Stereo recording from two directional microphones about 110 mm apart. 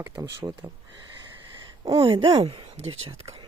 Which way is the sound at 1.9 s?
55° right (ahead or behind).